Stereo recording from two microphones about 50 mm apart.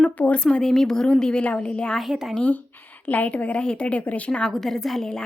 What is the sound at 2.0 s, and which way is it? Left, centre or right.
Speech, centre.